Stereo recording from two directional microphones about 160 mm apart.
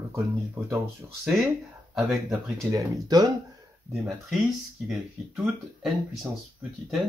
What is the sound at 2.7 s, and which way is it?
Speech, 25° right (ahead or behind).